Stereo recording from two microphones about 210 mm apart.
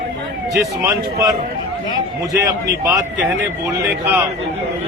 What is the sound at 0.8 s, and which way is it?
A man's voice, 15° right (ahead or behind).